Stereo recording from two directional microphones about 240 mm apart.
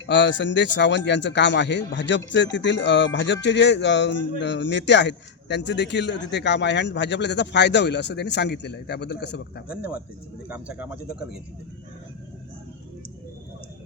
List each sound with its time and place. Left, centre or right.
0.0 s speech: left
9.6 s speech: centre